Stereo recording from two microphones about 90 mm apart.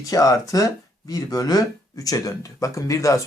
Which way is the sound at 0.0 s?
40° left (ahead or behind).